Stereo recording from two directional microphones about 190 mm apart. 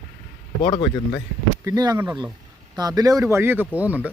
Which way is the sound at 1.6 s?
20° right (ahead or behind).